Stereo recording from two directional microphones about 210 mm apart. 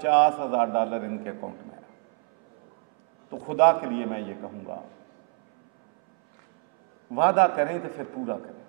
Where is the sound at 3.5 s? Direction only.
20° right (ahead or behind).